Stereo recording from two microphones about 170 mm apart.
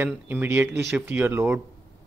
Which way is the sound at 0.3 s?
15° right (ahead or behind).